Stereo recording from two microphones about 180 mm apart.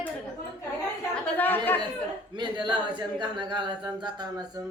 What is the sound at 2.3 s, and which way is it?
Speech, 25° right (ahead or behind).